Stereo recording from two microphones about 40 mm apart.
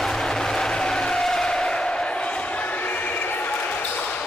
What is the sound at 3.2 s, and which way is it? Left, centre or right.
Basketball bounce, left.